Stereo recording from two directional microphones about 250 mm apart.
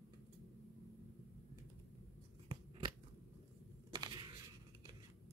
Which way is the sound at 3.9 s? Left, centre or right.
Centre.